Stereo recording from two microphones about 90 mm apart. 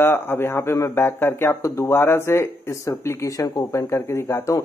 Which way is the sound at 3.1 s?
40° left (ahead or behind).